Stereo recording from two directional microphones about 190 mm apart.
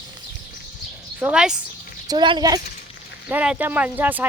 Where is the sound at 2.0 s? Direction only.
25° right (ahead or behind).